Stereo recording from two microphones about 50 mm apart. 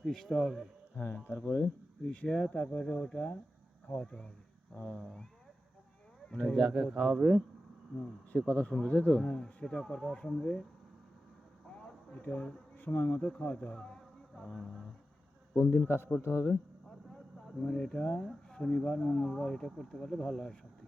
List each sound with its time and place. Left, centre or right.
0.0 s speech: centre
0.9 s speech: left
2.2 s speech: centre
6.4 s speech: centre
8.4 s speech: left
9.2 s speech: centre
11.8 s a sound: centre
12.2 s speech: left
15.5 s speech: left
17.7 s speech: centre